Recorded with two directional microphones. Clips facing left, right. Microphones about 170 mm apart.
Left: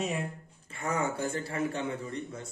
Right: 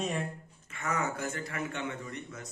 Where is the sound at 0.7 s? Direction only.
30° left (ahead or behind).